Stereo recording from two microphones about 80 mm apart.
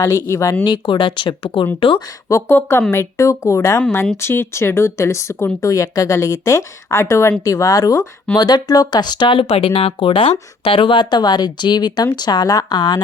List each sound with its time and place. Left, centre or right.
0.0 s speech: left
0.6 s speech: left
2.3 s speech: left
8.4 s speech: left
11.1 s a woman's voice: left